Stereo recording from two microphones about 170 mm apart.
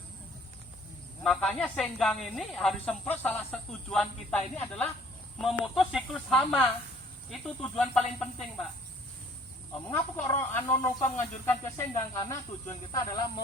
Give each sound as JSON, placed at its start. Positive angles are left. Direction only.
{"t": 1.2, "sound": "speech", "side_deg": 5}
{"t": 5.4, "sound": "speech", "side_deg": 0}
{"t": 9.9, "sound": "speech", "side_deg": 15}